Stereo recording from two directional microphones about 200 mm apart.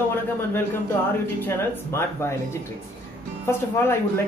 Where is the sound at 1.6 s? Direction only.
10° left (ahead or behind).